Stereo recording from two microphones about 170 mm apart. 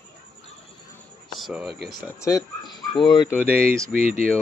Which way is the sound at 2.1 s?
20° left (ahead or behind).